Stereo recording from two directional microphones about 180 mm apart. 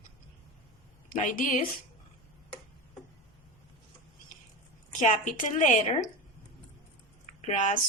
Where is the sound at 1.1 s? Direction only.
45° left (ahead or behind).